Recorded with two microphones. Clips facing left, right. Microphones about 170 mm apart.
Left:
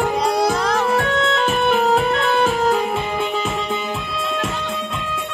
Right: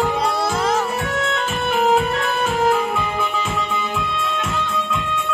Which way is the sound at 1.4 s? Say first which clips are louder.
Left 2 dB; 40° left (ahead or behind).